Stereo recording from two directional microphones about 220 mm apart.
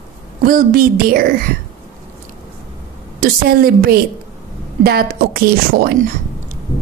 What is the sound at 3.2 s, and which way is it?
A woman's voice, 40° right (ahead or behind).